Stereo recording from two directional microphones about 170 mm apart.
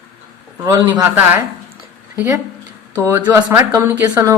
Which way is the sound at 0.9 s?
10° right (ahead or behind).